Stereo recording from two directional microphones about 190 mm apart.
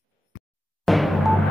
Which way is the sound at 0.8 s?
Centre (ahead or behind).